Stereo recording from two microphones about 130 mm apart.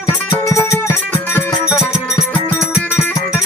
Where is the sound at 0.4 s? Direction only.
25° left (ahead or behind).